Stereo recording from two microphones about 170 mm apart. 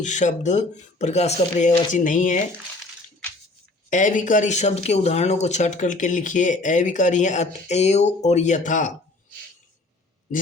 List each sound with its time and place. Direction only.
0.0 s speech: 45° left (ahead or behind)
3.8 s speech: 50° left (ahead or behind)